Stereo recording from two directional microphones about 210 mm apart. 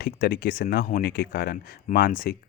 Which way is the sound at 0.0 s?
45° left (ahead or behind).